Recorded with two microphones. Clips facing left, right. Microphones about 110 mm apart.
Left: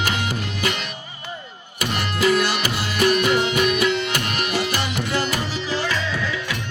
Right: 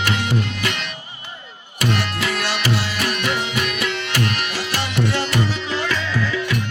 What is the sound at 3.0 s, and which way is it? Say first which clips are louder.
Music: left 5 dB; 55° left (ahead or behind).